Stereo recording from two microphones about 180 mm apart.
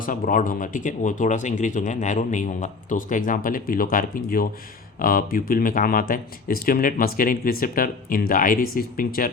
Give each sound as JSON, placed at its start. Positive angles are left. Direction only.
{"t": 0.0, "sound": "speech", "side_deg": 50}